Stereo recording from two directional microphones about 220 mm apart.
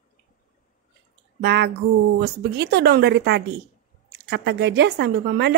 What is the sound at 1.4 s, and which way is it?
Speech, 50° right (ahead or behind).